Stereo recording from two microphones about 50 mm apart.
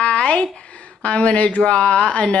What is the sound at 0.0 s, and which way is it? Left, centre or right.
Speech, left.